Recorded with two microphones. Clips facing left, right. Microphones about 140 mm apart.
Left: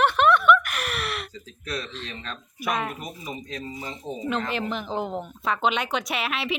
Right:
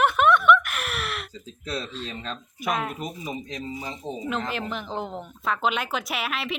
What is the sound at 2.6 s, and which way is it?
Speech, centre (ahead or behind).